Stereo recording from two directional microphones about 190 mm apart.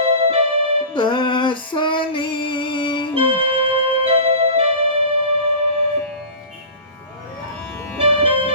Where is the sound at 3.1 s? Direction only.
30° right (ahead or behind).